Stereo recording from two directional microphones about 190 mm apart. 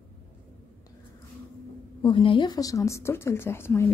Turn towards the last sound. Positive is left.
turn(degrees=10)  # may be behind; listen again after turning